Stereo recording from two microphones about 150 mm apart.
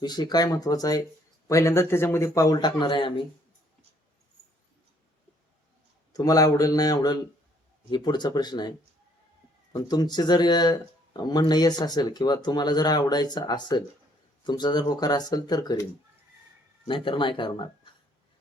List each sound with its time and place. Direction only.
0.0 s speech: 30° left (ahead or behind)
6.1 s speech: 25° left (ahead or behind)
9.7 s speech: 25° left (ahead or behind)